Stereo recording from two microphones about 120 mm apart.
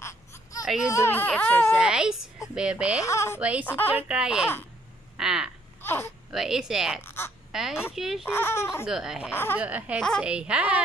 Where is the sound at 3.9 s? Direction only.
10° right (ahead or behind).